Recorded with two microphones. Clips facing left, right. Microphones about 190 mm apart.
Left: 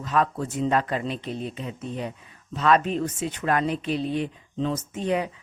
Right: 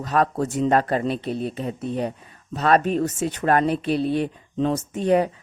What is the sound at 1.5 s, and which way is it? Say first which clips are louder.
A woman's voice: right 6 dB; 40° right (ahead or behind).